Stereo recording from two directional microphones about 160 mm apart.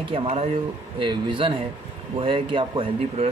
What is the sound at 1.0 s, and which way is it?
Speech, 30° right (ahead or behind).